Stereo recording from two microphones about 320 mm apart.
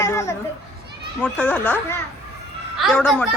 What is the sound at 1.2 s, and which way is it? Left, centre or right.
A woman's voice, centre.